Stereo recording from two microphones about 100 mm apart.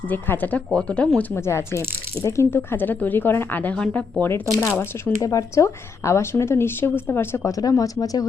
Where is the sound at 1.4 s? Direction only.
25° left (ahead or behind).